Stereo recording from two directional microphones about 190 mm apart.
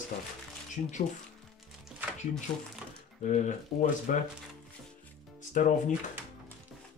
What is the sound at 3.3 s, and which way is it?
Speech, 40° left (ahead or behind).